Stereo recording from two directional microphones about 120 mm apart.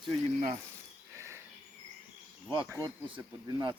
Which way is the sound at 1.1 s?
25° right (ahead or behind).